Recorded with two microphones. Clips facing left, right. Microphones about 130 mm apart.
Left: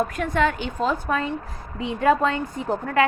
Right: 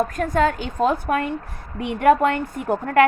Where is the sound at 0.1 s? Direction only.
40° right (ahead or behind).